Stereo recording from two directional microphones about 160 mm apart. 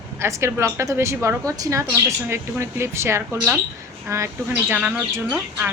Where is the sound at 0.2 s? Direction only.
20° right (ahead or behind).